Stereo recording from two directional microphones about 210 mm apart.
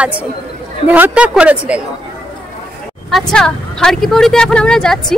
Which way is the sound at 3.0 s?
Centre (ahead or behind).